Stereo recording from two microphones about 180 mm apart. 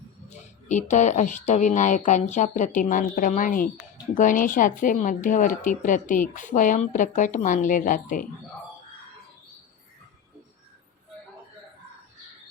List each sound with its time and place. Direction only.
0.7 s speech: 40° left (ahead or behind)